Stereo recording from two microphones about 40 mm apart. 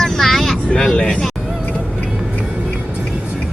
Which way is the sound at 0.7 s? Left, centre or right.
Left.